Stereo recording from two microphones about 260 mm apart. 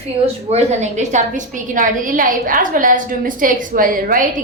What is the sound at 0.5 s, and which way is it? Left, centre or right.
A woman's voice, right.